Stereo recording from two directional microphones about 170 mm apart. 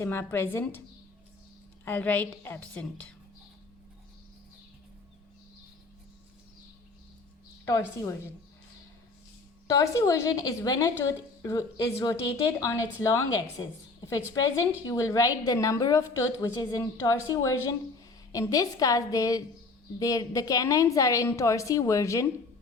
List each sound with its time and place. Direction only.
0.0 s a woman's voice: 15° left (ahead or behind)
1.8 s a woman's voice: 10° left (ahead or behind)
7.7 s a woman's voice: 15° left (ahead or behind)
9.6 s a woman's voice: 20° left (ahead or behind)